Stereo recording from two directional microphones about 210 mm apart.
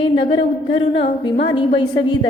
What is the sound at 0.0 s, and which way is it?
A woman's voice, 25° left (ahead or behind).